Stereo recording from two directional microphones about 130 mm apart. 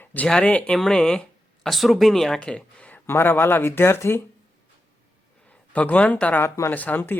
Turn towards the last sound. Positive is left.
turn(degrees=15)  # may be behind; listen again after turning